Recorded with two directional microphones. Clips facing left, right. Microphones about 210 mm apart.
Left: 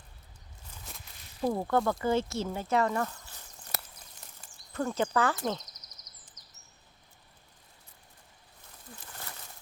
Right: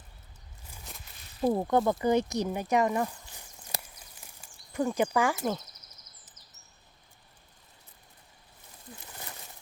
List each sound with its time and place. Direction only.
1.4 s speech: 20° right (ahead or behind)